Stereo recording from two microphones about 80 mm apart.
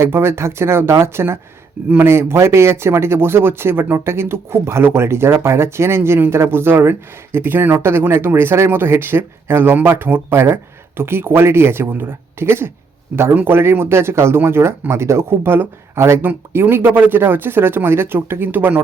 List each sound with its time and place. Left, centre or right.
0.0 s speech: right